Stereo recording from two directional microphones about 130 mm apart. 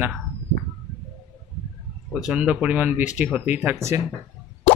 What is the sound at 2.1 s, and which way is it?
Speech, 5° right (ahead or behind).